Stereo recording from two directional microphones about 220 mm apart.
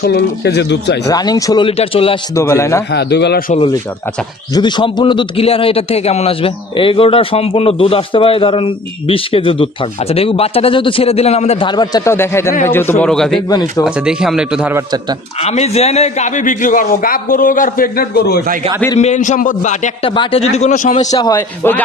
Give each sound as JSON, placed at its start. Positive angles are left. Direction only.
{"t": 0.0, "sound": "speech", "side_deg": 50}
{"t": 1.0, "sound": "a man's voice", "side_deg": 15}
{"t": 2.3, "sound": "a man's voice", "side_deg": 10}
{"t": 2.9, "sound": "speech", "side_deg": 50}
{"t": 4.6, "sound": "a man's voice", "side_deg": 20}
{"t": 13.5, "sound": "a man's voice", "side_deg": 15}
{"t": 13.8, "sound": "speech", "side_deg": -5}
{"t": 15.4, "sound": "a man's voice", "side_deg": 30}
{"t": 18.9, "sound": "a man's voice", "side_deg": 30}
{"t": 21.1, "sound": "a man's voice", "side_deg": 15}